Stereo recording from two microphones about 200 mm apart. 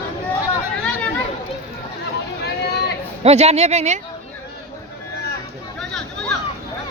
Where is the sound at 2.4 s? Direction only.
55° left (ahead or behind).